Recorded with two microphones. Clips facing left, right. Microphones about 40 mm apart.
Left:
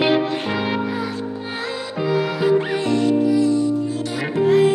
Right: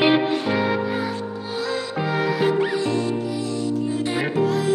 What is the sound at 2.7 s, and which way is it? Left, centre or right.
Music, left.